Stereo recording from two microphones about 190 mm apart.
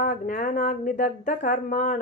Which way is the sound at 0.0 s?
45° left (ahead or behind).